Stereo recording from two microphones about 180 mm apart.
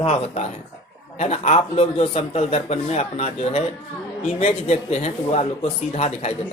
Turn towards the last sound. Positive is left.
turn(degrees=35)  # may be behind; listen again after turning